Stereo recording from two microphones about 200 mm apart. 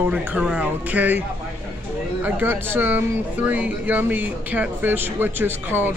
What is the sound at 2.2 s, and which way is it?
Speech, 10° right (ahead or behind).